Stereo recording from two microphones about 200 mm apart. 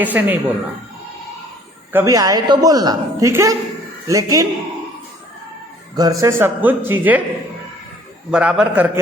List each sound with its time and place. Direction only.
0.0 s a woman's voice: 10° right (ahead or behind)
1.9 s a woman's voice: 15° right (ahead or behind)
6.0 s a woman's voice: 15° right (ahead or behind)
8.3 s a man's voice: 5° right (ahead or behind)